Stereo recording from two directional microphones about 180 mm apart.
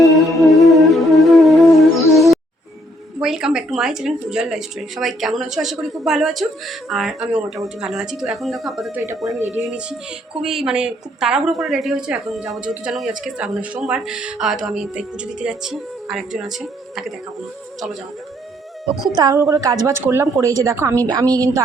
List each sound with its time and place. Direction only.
0.0 s music: centre (ahead or behind)
3.2 s a woman's voice: centre (ahead or behind)
19.1 s a woman's voice: 20° right (ahead or behind)